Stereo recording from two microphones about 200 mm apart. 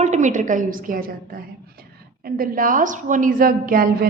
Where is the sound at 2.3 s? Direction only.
45° right (ahead or behind).